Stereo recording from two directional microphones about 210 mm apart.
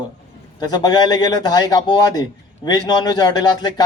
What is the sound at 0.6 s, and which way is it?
A man's voice, 20° left (ahead or behind).